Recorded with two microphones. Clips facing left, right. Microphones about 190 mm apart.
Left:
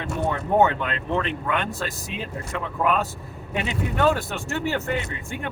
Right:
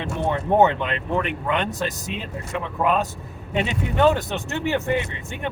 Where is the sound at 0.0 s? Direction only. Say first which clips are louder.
Right 2 dB; 20° right (ahead or behind).